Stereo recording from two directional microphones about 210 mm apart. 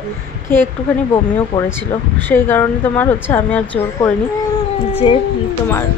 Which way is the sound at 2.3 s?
10° left (ahead or behind).